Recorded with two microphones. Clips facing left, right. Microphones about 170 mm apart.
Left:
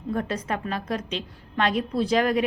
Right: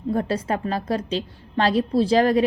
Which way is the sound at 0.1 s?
30° right (ahead or behind).